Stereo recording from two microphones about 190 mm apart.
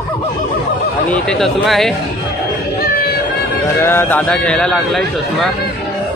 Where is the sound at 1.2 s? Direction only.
Centre (ahead or behind).